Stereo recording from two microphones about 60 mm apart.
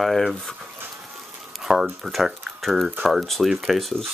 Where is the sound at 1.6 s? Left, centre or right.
Centre.